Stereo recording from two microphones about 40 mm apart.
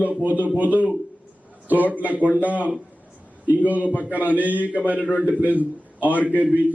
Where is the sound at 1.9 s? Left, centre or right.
Right.